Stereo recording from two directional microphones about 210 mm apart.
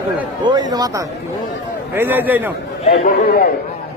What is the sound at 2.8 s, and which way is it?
Speech, 30° left (ahead or behind).